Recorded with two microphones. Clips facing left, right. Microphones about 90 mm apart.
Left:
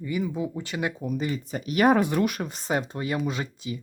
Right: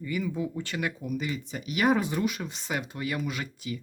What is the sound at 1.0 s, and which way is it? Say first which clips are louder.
Speech: left 3 dB; 35° left (ahead or behind).